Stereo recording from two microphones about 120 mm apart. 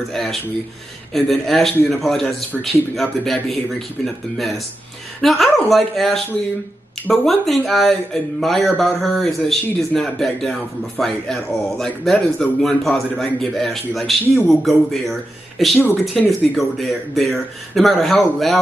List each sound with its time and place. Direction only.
0.1 s speech: centre (ahead or behind)
14.2 s speech: 15° left (ahead or behind)
14.5 s speech: centre (ahead or behind)